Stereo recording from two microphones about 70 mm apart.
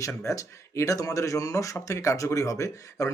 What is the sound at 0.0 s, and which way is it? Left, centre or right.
Speech, left.